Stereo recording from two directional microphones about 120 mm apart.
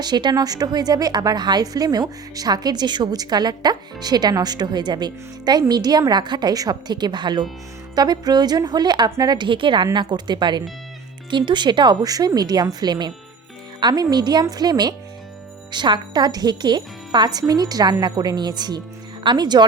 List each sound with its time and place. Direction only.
0.0 s a woman's voice: 35° right (ahead or behind)